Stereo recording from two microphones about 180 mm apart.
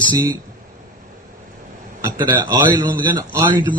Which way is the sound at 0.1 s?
25° right (ahead or behind).